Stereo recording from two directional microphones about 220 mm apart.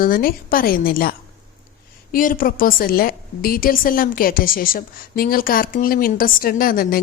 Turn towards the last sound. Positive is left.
turn(degrees=40)  # may be behind; listen again after turning